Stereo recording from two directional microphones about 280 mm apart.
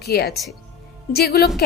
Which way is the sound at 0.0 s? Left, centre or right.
Left.